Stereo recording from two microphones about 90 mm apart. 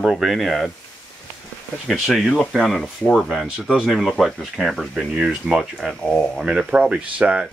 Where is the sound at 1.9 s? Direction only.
Centre (ahead or behind).